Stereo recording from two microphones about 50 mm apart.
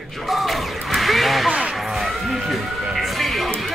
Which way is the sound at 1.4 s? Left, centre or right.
Centre.